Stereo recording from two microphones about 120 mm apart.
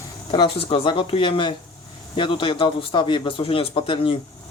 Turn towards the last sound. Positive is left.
turn(degrees=45)  # may be behind; listen again after turning